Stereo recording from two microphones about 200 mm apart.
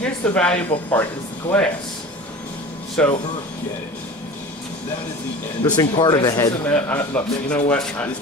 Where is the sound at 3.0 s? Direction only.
5° left (ahead or behind).